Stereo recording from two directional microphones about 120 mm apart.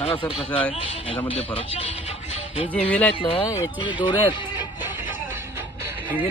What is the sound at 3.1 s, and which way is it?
Speech, 40° left (ahead or behind).